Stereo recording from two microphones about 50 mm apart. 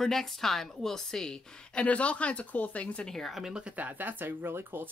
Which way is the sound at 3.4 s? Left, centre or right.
Centre.